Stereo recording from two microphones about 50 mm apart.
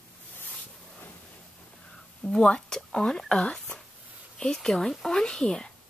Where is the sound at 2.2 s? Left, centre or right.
Centre.